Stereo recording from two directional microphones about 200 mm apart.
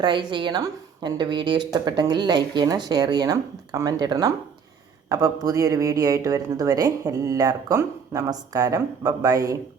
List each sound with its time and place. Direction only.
0.0 s a woman's voice: 25° right (ahead or behind)